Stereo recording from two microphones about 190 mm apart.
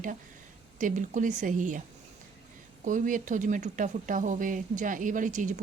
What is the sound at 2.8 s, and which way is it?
Speech, 45° right (ahead or behind).